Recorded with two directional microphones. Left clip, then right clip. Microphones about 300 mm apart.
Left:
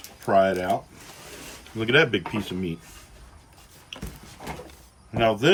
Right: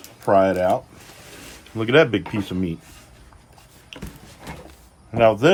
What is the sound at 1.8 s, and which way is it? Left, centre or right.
Speech, centre.